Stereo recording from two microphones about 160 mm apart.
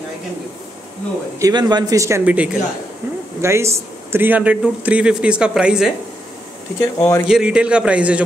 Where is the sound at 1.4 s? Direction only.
25° right (ahead or behind).